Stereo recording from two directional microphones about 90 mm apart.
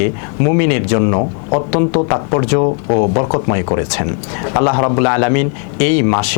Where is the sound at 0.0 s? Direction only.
15° left (ahead or behind).